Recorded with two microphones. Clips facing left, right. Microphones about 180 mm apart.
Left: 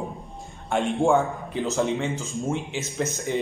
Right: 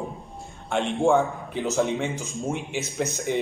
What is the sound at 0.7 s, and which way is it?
A man's voice, centre (ahead or behind).